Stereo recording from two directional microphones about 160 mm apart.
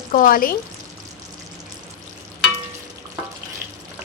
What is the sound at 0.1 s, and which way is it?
Speech, 60° left (ahead or behind).